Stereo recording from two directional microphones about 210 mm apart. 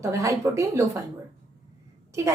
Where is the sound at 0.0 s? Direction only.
15° right (ahead or behind).